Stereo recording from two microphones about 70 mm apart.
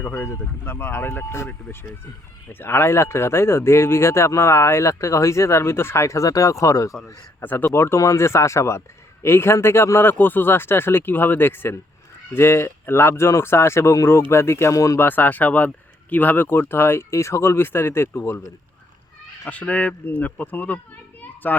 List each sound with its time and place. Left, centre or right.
0.0 s speech: left
7.4 s speech: left
7.7 s speech: left
14.7 s speech: left
14.9 s speech: left
19.5 s speech: centre